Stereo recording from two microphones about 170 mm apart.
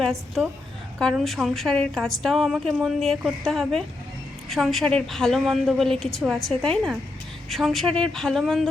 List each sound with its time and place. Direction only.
0.0 s a woman's voice: centre (ahead or behind)